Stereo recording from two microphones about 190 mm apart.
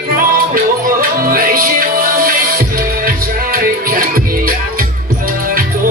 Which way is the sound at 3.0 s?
50° right (ahead or behind).